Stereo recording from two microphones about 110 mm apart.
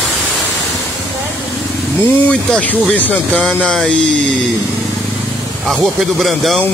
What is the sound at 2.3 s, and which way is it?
Speech, 10° left (ahead or behind).